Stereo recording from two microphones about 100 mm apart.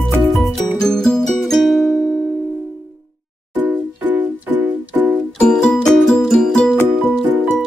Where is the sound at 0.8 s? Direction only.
5° left (ahead or behind).